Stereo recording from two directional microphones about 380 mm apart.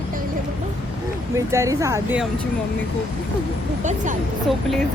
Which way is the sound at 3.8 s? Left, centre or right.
Centre.